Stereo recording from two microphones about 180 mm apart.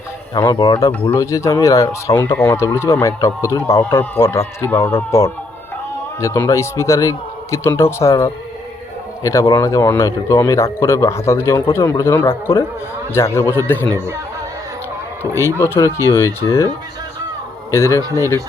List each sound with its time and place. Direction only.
0.3 s speech: 20° left (ahead or behind)
15.4 s speech: 15° left (ahead or behind)